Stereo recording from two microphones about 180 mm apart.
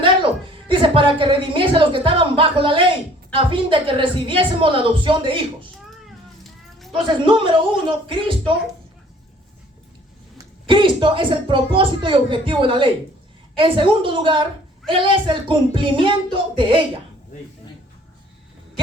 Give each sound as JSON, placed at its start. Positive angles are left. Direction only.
{"t": 0.7, "sound": "a woman's voice", "side_deg": -30}
{"t": 7.0, "sound": "a woman's voice", "side_deg": -25}
{"t": 10.3, "sound": "a woman's voice", "side_deg": -25}